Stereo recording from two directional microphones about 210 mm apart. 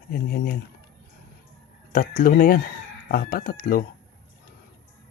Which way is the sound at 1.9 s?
45° left (ahead or behind).